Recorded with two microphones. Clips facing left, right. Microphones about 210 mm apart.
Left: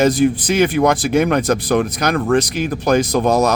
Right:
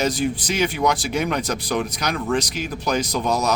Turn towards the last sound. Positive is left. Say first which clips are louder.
# left 7 dB
turn(degrees=50)  # may be behind; listen again after turning